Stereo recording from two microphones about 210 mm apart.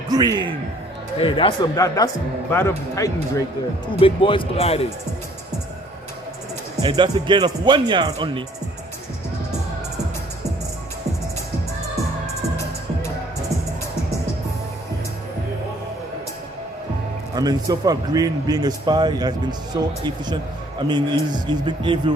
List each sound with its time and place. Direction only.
0.1 s a man's voice: 20° right (ahead or behind)
1.1 s speech: 25° left (ahead or behind)
6.8 s a man's voice: 20° right (ahead or behind)
17.3 s a man's voice: 20° right (ahead or behind)